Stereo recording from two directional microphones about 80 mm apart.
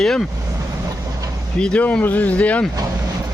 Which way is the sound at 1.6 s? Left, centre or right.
Centre.